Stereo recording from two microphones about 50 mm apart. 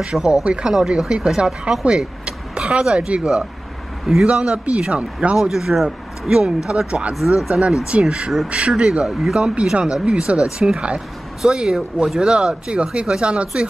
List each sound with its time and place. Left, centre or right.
0.0 s a man's voice: centre
4.0 s a man's voice: centre
4.3 s a man's voice: right
5.4 s speech: centre
6.9 s a man's voice: right
7.3 s a man's voice: centre
10.0 s speech: centre